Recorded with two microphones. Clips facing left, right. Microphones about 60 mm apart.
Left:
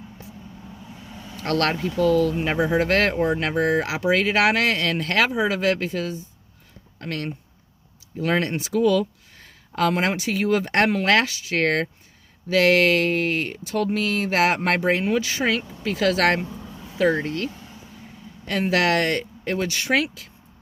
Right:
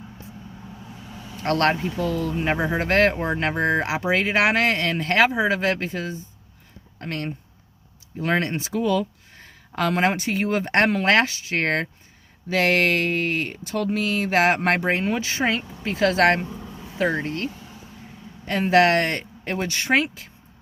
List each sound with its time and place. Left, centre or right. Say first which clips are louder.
1.4 s speech: right 2 dB; right